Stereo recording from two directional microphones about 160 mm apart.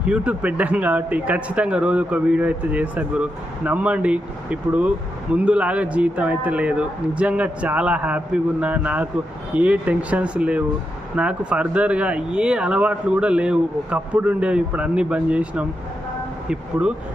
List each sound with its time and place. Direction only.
0.0 s speech: 10° right (ahead or behind)